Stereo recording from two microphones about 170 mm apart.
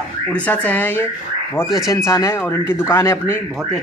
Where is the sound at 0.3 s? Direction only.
10° left (ahead or behind).